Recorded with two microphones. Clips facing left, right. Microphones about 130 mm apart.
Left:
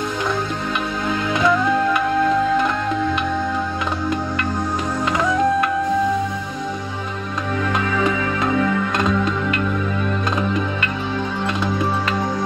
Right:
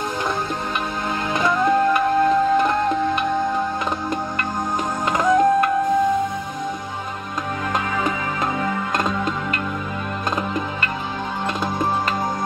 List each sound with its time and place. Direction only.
1.3 s music: 45° right (ahead or behind)
5.1 s music: 45° right (ahead or behind)
8.5 s music: 30° right (ahead or behind)